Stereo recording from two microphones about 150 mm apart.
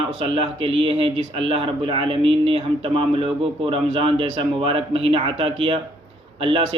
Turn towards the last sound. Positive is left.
turn(degrees=-35)  # may be behind; listen again after turning